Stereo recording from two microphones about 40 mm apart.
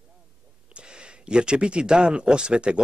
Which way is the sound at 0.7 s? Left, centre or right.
Right.